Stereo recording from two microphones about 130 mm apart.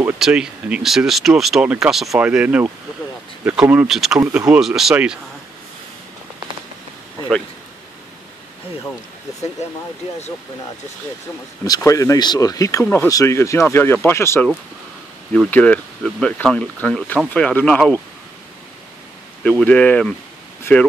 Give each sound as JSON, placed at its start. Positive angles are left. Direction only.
{"t": 0.2, "sound": "speech", "side_deg": -5}
{"t": 11.6, "sound": "speech", "side_deg": 30}
{"t": 12.8, "sound": "speech", "side_deg": 15}
{"t": 19.4, "sound": "speech", "side_deg": 10}